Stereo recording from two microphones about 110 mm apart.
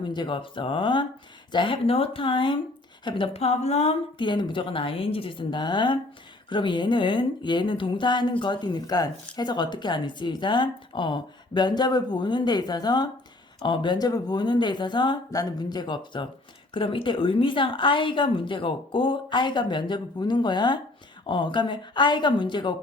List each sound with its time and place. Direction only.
0.0 s a woman's voice: 45° left (ahead or behind)
3.3 s speech: 70° left (ahead or behind)
4.2 s a woman's voice: 45° left (ahead or behind)
15.3 s a woman's voice: 35° left (ahead or behind)